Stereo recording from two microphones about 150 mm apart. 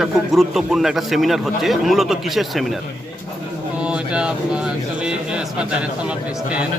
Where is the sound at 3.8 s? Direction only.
5° right (ahead or behind).